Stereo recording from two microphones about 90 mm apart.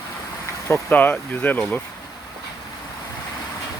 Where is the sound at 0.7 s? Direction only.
20° left (ahead or behind).